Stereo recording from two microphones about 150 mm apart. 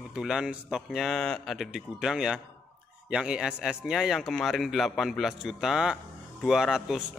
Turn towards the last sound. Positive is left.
turn(degrees=-5)  # may be behind; listen again after turning